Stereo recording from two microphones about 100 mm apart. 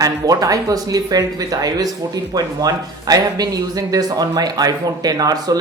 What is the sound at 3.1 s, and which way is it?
Speech, 40° right (ahead or behind).